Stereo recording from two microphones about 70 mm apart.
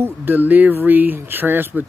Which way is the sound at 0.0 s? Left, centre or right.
Right.